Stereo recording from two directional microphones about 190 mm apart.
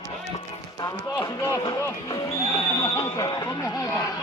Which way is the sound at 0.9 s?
10° left (ahead or behind).